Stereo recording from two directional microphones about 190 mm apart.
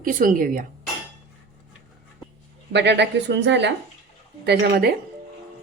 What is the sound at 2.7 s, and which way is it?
Speech, 65° right (ahead or behind).